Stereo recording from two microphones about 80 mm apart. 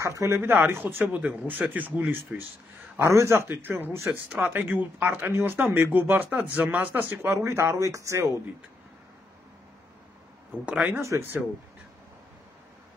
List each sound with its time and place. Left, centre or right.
0.0 s speech: right
0.4 s speech: right
1.0 s speech: centre
3.0 s speech: right
7.4 s speech: right
10.6 s speech: centre
11.0 s speech: right